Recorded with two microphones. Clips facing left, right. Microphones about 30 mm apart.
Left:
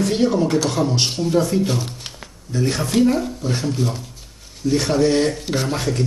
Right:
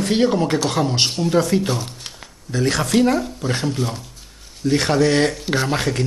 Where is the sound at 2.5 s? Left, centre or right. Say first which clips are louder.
Right 2 dB; right.